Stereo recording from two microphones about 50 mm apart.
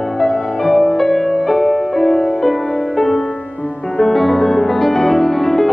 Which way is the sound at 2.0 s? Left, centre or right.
Centre.